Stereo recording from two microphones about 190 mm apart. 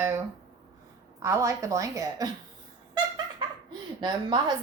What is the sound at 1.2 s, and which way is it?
A woman's voice, 15° right (ahead or behind).